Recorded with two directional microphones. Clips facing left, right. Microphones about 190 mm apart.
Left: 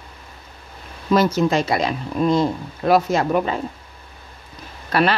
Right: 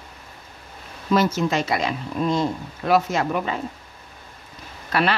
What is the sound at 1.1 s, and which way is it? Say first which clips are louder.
Speech: left 3 dB; 35° left (ahead or behind).